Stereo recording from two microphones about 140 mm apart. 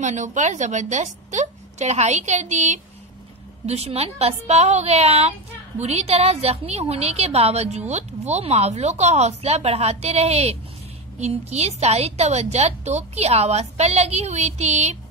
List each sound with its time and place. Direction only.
0.0 s a woman's voice: 60° right (ahead or behind)